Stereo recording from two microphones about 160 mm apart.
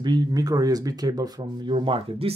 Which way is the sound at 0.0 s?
25° right (ahead or behind).